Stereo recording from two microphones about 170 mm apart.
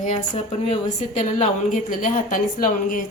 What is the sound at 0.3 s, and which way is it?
A woman's voice, 40° left (ahead or behind).